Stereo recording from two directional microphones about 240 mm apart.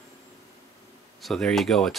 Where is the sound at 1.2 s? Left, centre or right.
Centre.